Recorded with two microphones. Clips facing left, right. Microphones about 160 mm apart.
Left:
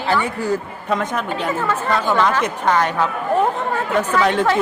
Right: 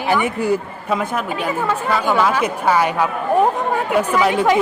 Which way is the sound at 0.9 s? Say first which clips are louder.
Even; 5° right (ahead or behind).